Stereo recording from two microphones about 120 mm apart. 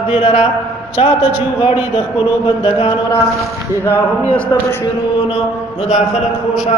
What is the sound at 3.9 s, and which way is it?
Speech, 15° left (ahead or behind).